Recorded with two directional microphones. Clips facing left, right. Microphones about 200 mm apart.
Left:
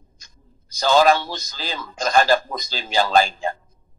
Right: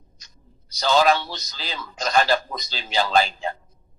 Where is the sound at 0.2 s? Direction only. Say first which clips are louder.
Even; 50° left (ahead or behind).